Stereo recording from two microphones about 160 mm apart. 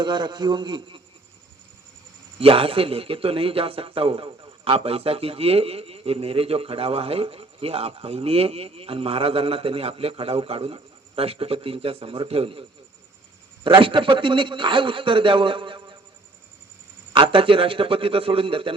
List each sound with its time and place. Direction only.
0.0 s a man's voice: 30° right (ahead or behind)
2.4 s a man's voice: 35° right (ahead or behind)
13.7 s a man's voice: 30° right (ahead or behind)
17.1 s a man's voice: 30° right (ahead or behind)